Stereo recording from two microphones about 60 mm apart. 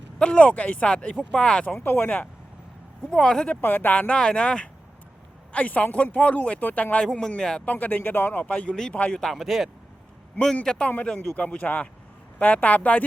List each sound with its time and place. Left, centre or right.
0.2 s speech: centre
1.7 s speech: left
2.0 s speech: left
3.1 s speech: centre
3.6 s speech: left
7.0 s speech: centre
7.6 s speech: left
9.2 s a man's voice: centre
10.4 s speech: centre; by 13.1 s left